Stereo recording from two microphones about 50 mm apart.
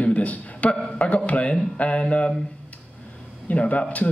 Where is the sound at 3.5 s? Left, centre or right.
Left.